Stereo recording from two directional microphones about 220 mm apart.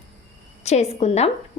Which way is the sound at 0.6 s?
30° left (ahead or behind).